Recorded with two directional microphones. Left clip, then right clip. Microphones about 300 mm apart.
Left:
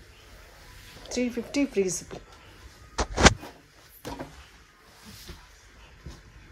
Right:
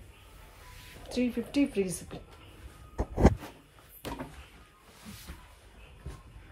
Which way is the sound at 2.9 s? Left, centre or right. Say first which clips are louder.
Left 8 dB; right.